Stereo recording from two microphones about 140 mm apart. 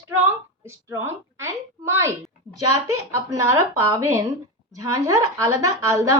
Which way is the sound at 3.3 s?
20° right (ahead or behind).